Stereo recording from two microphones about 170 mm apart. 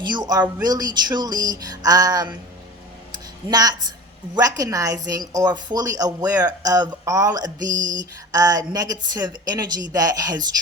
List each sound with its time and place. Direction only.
0.0 s a woman's voice: 25° right (ahead or behind)
3.5 s speech: 25° right (ahead or behind)